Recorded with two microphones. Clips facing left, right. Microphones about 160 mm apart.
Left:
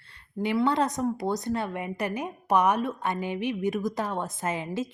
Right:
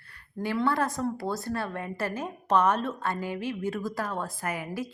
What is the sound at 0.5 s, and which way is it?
A woman's voice, 20° left (ahead or behind).